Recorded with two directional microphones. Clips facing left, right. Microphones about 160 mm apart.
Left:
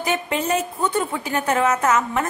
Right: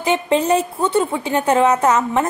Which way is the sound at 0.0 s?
30° right (ahead or behind).